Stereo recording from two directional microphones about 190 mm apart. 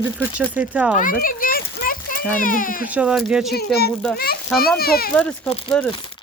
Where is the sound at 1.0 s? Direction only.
45° left (ahead or behind).